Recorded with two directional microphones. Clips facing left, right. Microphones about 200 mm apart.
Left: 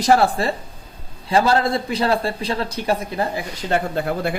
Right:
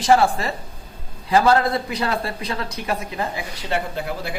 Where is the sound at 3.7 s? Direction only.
55° left (ahead or behind).